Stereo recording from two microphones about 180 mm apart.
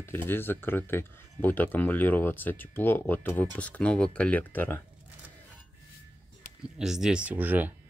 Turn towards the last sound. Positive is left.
turn(degrees=-10)  # may be behind; listen again after turning